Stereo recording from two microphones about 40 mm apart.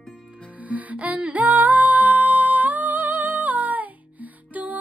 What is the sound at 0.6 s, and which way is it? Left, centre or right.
Music, right.